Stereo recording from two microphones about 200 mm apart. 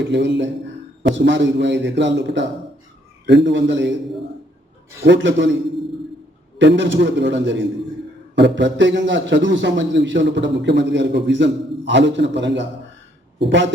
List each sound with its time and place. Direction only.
0.1 s a man's voice: 65° right (ahead or behind)
5.0 s a man's voice: 65° right (ahead or behind)
6.6 s a man's voice: 60° right (ahead or behind)